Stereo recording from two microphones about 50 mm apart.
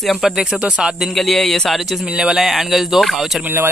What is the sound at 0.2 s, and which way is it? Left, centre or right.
Speech, centre.